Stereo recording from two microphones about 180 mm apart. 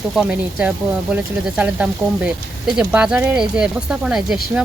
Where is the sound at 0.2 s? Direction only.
5° right (ahead or behind).